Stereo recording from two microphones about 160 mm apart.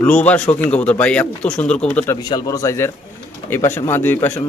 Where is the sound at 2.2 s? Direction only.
25° left (ahead or behind).